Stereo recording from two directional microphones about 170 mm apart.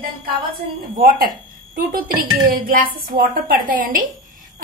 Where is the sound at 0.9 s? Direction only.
55° right (ahead or behind).